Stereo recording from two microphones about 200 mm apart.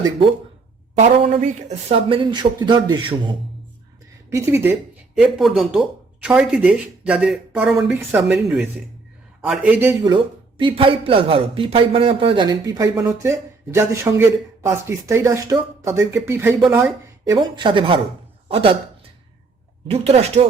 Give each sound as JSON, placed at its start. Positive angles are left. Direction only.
{"t": 0.9, "sound": "speech", "side_deg": -35}
{"t": 4.4, "sound": "speech", "side_deg": -10}
{"t": 10.6, "sound": "speech", "side_deg": -25}
{"t": 17.2, "sound": "speech", "side_deg": -20}
{"t": 19.9, "sound": "speech", "side_deg": -30}